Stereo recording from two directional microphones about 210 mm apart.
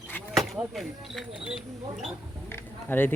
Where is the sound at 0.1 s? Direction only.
Centre (ahead or behind).